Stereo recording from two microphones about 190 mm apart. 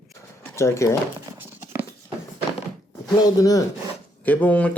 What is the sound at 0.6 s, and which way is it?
Speech, 15° left (ahead or behind).